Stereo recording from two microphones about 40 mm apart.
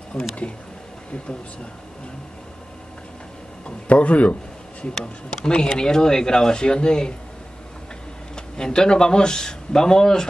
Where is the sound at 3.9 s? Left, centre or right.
Left.